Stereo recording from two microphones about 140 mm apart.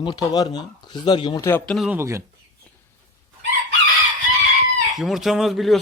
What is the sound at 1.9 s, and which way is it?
Speech, 20° right (ahead or behind).